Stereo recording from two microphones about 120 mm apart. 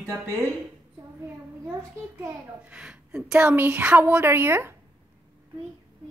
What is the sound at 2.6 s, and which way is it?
Speech, 10° right (ahead or behind).